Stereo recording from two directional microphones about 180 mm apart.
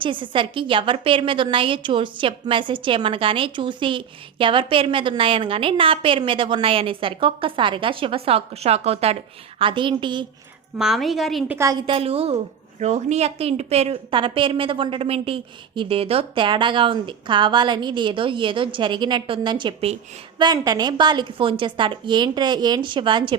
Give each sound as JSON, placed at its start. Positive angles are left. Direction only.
{"t": 0.0, "sound": "a woman's voice", "side_deg": -25}
{"t": 10.8, "sound": "a woman's voice", "side_deg": 0}
{"t": 11.5, "sound": "a woman's voice", "side_deg": -20}